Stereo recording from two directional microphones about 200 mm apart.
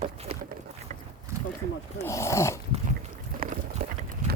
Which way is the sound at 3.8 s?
55° right (ahead or behind).